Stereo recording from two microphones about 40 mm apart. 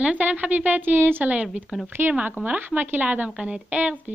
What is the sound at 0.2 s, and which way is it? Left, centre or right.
A woman's voice, right.